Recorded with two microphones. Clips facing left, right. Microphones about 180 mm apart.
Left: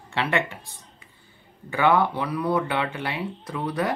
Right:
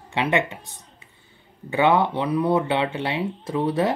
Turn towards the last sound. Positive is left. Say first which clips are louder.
# right 5 dB
turn(degrees=-25)  # may be behind; listen again after turning